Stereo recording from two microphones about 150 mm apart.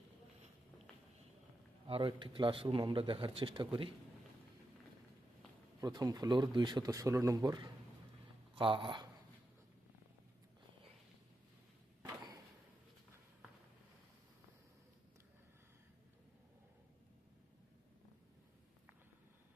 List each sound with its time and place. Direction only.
1.9 s speech: 35° right (ahead or behind)
5.8 s speech: 25° right (ahead or behind)